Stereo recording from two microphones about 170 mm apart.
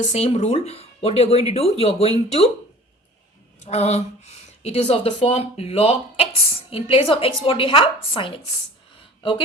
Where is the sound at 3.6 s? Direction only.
40° left (ahead or behind).